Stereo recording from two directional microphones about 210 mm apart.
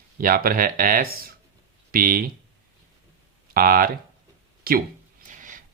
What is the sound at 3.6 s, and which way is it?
Speech, 45° right (ahead or behind).